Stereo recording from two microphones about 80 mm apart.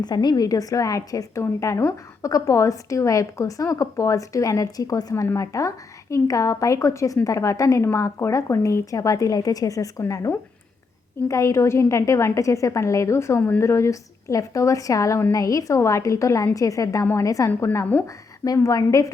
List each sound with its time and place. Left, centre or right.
0.0 s a woman's voice: left
11.3 s a woman's voice: left